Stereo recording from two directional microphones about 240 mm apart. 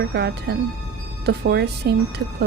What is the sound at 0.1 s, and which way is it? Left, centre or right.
A woman's voice, right.